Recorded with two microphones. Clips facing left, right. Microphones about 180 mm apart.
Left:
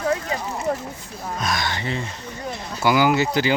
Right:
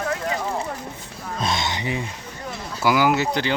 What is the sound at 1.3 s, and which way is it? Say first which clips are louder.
Speech: right 1 dB; 25° right (ahead or behind).